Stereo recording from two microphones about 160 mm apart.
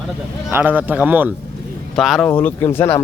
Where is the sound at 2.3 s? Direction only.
15° left (ahead or behind).